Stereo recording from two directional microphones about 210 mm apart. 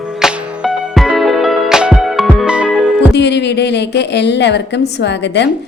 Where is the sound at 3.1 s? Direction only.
55° left (ahead or behind).